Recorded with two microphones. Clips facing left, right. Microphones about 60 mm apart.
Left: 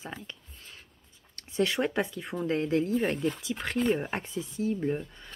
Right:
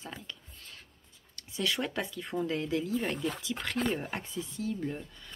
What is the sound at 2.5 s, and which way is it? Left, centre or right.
Speech, left.